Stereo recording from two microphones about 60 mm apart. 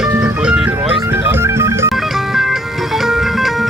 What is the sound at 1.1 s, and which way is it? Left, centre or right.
Music, right.